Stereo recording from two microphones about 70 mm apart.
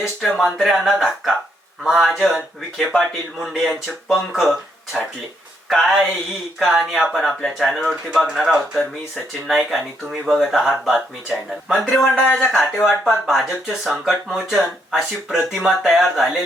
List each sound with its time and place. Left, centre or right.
0.2 s speech: centre
5.6 s speech: centre
8.3 s speech: centre
12.1 s speech: centre
12.4 s speech: centre